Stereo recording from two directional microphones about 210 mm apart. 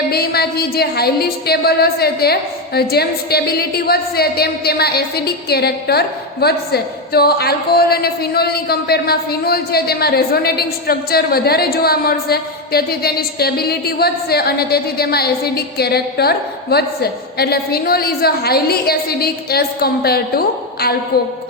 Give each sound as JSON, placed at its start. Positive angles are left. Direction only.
{"t": 0.1, "sound": "a woman's voice", "side_deg": 50}